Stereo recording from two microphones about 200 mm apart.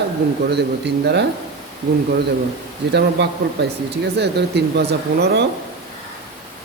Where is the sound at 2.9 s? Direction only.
55° right (ahead or behind).